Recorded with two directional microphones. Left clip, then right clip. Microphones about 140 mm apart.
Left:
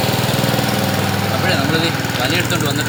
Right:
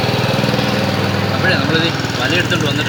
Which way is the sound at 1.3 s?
10° left (ahead or behind).